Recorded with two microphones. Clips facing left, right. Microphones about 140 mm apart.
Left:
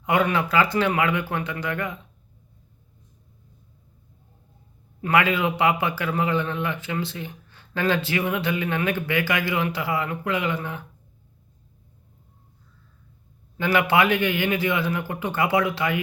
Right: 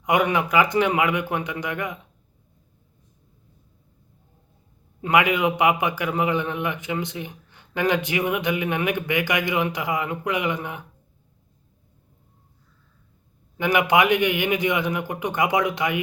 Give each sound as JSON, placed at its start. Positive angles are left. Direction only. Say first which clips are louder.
{"t": 0.0, "sound": "a man's voice", "louder": "right 1 dB", "side_deg": -15}
{"t": 4.9, "sound": "a man's voice", "louder": "right 1 dB", "side_deg": -15}
{"t": 13.6, "sound": "a man's voice", "louder": "right 1 dB", "side_deg": -15}